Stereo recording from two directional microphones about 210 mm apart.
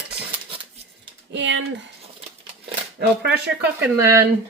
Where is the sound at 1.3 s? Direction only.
60° right (ahead or behind).